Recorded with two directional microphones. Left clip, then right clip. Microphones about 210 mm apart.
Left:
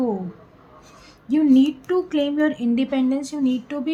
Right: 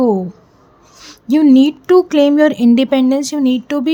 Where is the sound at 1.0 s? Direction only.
55° right (ahead or behind).